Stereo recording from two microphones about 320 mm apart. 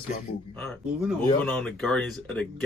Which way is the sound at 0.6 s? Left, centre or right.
Centre.